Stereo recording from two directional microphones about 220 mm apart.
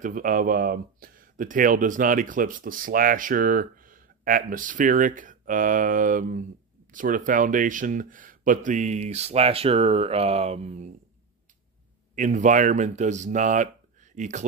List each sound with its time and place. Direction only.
0.0 s speech: 35° right (ahead or behind)
12.2 s speech: 35° right (ahead or behind)